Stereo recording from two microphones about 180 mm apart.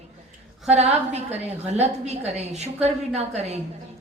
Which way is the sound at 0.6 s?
35° right (ahead or behind).